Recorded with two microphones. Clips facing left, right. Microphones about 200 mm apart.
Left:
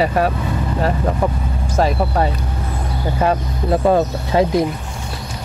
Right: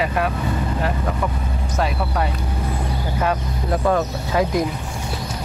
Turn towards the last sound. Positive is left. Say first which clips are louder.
# left 4 dB
turn(degrees=25)  # may be behind; listen again after turning